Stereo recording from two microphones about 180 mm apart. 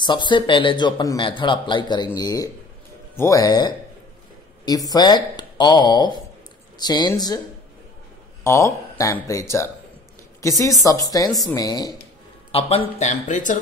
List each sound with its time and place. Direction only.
0.0 s a man's voice: 25° left (ahead or behind)
8.5 s a man's voice: 15° left (ahead or behind)
12.4 s speech: 35° left (ahead or behind)